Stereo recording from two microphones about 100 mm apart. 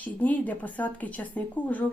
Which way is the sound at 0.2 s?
15° left (ahead or behind).